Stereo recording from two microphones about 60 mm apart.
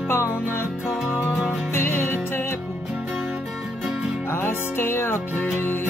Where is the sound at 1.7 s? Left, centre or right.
Left.